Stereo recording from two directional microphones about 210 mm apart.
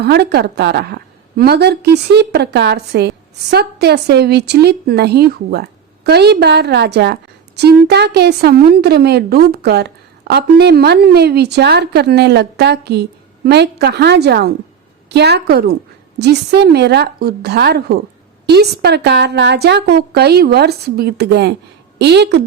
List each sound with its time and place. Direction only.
0.0 s a woman's voice: 50° right (ahead or behind)